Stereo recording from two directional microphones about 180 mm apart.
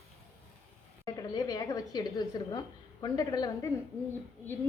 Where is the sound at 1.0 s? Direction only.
20° left (ahead or behind).